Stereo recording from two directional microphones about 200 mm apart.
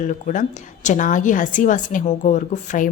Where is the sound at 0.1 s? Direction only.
40° left (ahead or behind).